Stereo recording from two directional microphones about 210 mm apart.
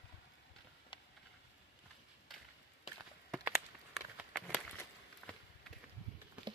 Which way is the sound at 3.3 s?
Centre (ahead or behind).